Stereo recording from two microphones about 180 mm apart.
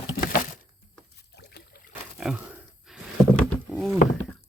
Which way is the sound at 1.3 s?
65° left (ahead or behind).